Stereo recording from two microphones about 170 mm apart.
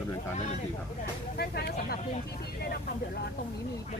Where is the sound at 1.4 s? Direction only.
70° left (ahead or behind).